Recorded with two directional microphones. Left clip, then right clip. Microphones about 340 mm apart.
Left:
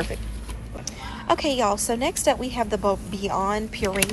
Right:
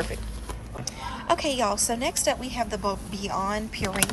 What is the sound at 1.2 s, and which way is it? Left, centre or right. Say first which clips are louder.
A woman's voice: left 3 dB; centre.